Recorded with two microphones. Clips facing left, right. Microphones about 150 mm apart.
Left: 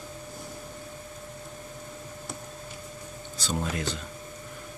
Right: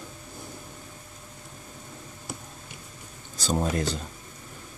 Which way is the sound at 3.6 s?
40° right (ahead or behind).